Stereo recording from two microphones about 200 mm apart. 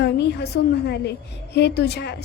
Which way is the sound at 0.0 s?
55° left (ahead or behind).